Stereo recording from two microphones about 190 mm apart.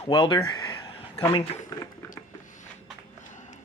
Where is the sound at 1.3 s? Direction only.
25° left (ahead or behind).